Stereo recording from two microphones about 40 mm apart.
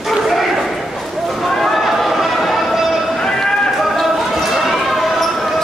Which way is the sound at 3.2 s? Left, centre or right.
Centre.